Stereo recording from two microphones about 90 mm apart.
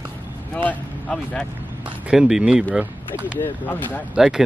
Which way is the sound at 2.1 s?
5° right (ahead or behind).